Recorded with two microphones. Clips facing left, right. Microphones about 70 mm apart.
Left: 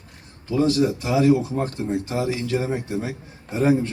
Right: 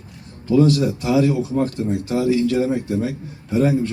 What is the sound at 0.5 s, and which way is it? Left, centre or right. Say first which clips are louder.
A man's voice: right 4 dB; left.